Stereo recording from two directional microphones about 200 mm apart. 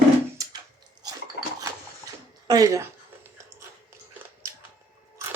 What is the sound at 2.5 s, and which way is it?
Speech, 15° right (ahead or behind).